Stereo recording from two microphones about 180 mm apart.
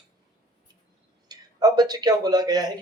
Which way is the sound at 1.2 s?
20° right (ahead or behind).